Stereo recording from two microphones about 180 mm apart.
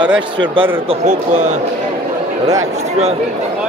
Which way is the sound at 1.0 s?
40° right (ahead or behind).